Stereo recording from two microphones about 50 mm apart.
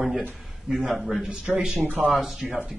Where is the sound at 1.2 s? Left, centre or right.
Centre.